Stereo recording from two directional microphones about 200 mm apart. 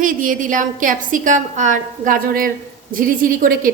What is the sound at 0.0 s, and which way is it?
A woman's voice, 40° right (ahead or behind).